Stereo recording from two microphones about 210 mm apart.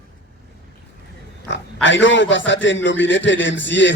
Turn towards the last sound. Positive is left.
turn(degrees=60)  # may be behind; listen again after turning